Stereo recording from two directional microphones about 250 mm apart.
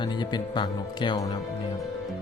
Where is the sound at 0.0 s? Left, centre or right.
Centre.